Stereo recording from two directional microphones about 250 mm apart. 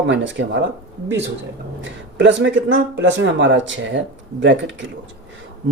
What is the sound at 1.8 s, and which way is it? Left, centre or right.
Speech, right.